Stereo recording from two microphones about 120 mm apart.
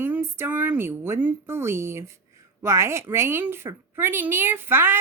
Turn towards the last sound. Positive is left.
turn(degrees=-20)  # may be behind; listen again after turning